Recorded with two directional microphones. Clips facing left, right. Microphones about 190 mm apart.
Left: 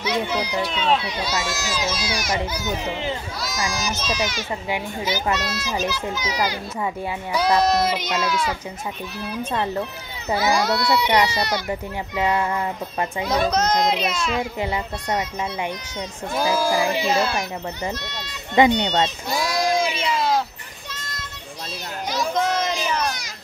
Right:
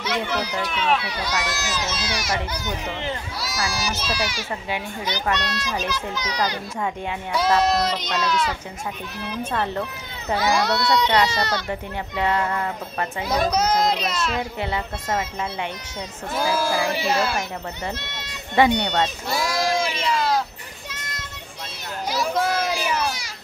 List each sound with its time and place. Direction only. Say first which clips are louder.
0.0 s speech: left 2 dB; 10° left (ahead or behind)
3.7 s a child's voice: left 1 dB; 10° right (ahead or behind)
4.6 s a child's voice: left 4 dB; 10° left (ahead or behind)
10.3 s speech: left 1 dB; 5° left (ahead or behind)
13.3 s a child's voice: even; 10° right (ahead or behind)
16.4 s speech: left 2 dB; 15° left (ahead or behind)
17.0 s a child's voice: left 1 dB; 5° right (ahead or behind)
18.8 s speech: left 1 dB; 15° left (ahead or behind)
19.5 s a sound: left 3 dB; centre (ahead or behind)
22.1 s children playing: even; 5° right (ahead or behind)